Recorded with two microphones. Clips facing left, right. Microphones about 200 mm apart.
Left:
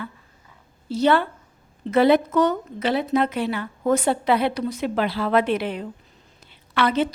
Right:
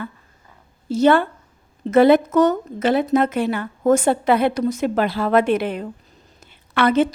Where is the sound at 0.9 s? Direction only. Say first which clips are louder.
Right 4 dB; 50° right (ahead or behind).